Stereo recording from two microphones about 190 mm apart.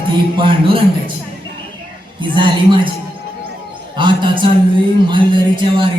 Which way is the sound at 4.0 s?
25° right (ahead or behind).